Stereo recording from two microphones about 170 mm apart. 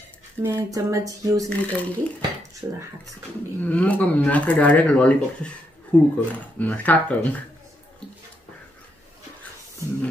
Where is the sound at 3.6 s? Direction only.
10° left (ahead or behind).